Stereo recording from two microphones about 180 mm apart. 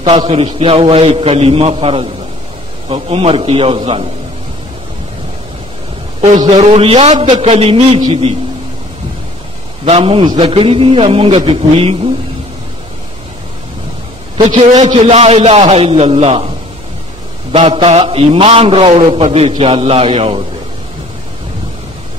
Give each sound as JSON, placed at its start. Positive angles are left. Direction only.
{"t": 0.0, "sound": "a man's voice", "side_deg": -25}
{"t": 6.4, "sound": "a man's voice", "side_deg": -30}
{"t": 9.8, "sound": "a man's voice", "side_deg": -35}
{"t": 14.3, "sound": "a man's voice", "side_deg": -30}